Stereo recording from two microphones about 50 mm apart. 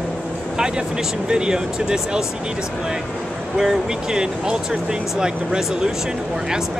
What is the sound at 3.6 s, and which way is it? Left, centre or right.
Speech, centre.